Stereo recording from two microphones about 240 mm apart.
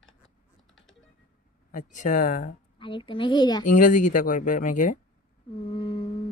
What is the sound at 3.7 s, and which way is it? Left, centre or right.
Speech, left.